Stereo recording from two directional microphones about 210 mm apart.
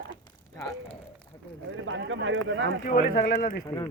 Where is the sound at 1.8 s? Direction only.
65° right (ahead or behind).